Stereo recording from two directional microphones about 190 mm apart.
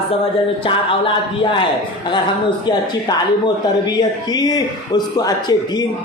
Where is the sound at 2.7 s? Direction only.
25° left (ahead or behind).